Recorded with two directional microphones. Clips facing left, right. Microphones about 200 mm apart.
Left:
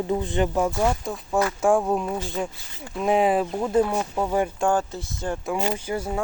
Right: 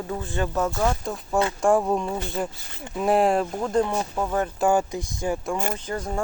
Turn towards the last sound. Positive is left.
turn(degrees=10)  # may be behind; listen again after turning